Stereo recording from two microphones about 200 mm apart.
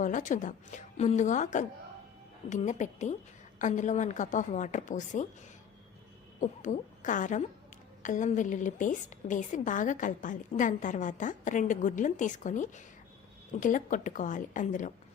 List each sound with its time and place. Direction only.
0.0 s a woman's voice: 40° left (ahead or behind)
6.4 s a woman's voice: 40° left (ahead or behind)